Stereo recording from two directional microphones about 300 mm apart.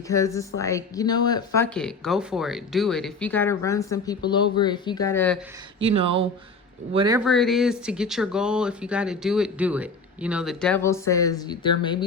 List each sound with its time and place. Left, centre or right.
0.1 s speech: centre
5.8 s speech: centre
7.3 s speech: centre